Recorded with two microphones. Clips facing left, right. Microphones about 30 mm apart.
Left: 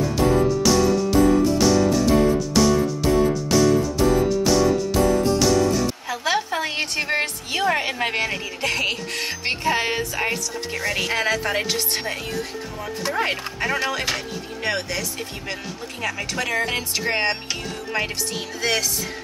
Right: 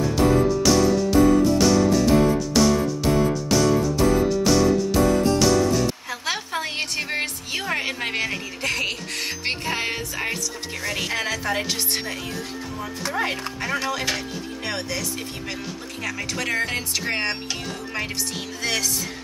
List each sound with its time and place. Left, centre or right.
0.7 s music: centre
8.6 s music: centre
9.2 s music: centre
9.8 s speech: centre
11.6 s speech: centre
13.0 s speech: centre